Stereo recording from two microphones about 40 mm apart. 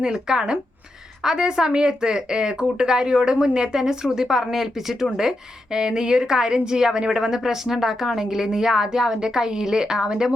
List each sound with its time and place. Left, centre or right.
0.0 s a woman's voice: centre